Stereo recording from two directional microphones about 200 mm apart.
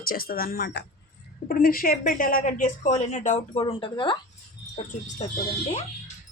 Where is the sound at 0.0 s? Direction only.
45° left (ahead or behind); by 4.2 s 25° left (ahead or behind).